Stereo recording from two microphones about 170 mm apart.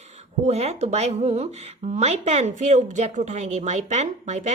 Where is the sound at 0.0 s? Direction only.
40° right (ahead or behind).